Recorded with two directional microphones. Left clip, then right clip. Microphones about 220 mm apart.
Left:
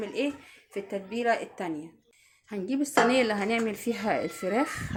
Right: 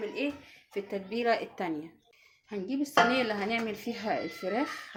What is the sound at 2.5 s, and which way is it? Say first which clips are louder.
A woman's voice: left 4 dB; 20° left (ahead or behind).